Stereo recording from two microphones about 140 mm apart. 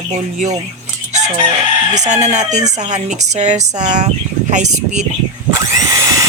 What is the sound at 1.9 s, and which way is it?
Speech, 55° right (ahead or behind).